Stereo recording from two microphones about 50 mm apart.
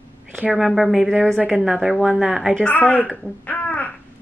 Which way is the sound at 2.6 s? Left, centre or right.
Left.